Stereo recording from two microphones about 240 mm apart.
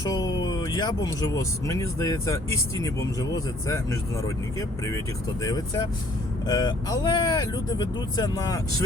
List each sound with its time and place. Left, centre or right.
0.0 s speech: centre